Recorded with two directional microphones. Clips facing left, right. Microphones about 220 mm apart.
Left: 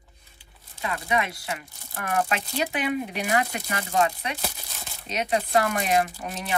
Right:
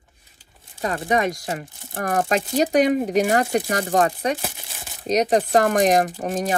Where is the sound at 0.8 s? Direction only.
45° right (ahead or behind).